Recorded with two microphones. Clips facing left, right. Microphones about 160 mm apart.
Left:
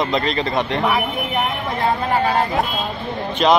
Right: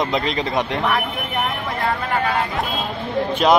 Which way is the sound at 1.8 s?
30° left (ahead or behind).